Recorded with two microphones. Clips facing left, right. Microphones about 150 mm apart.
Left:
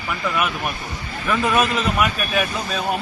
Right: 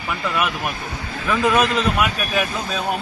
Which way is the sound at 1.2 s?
5° left (ahead or behind).